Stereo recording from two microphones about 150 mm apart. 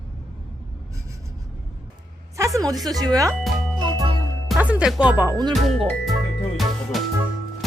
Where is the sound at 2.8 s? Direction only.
25° right (ahead or behind).